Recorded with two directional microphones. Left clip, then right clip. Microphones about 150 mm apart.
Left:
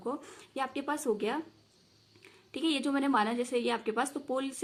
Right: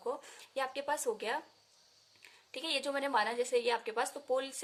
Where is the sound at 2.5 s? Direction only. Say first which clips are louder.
Left 4 dB; 25° right (ahead or behind).